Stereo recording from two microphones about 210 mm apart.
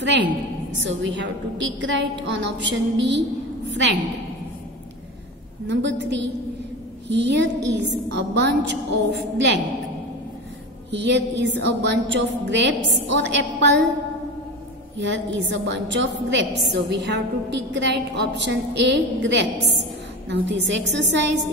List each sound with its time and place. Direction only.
0.7 s a woman's voice: 60° right (ahead or behind)
5.7 s a woman's voice: 60° right (ahead or behind)
10.9 s a woman's voice: 55° right (ahead or behind)
15.0 s a woman's voice: 55° right (ahead or behind)